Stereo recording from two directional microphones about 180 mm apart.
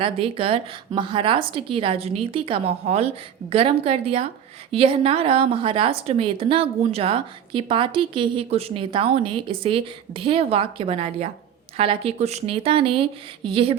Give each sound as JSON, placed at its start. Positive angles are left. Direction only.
{"t": 0.0, "sound": "a woman's voice", "side_deg": -30}